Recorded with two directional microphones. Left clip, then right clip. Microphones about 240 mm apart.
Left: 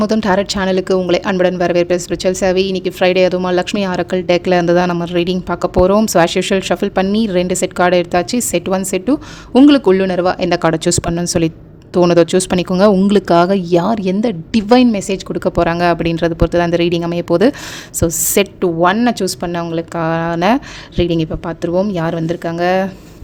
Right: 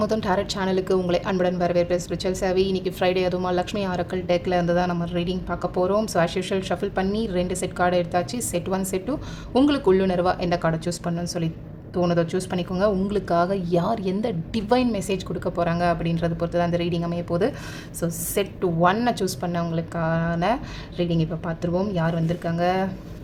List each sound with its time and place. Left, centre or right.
0.0 s a woman's voice: left